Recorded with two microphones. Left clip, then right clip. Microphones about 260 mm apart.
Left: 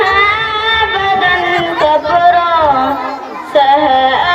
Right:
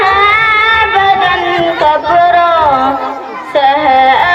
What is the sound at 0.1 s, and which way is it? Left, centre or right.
Music, centre.